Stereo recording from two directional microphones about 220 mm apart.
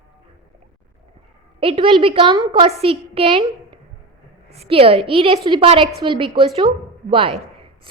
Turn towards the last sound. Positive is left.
turn(degrees=-25)  # may be behind; listen again after turning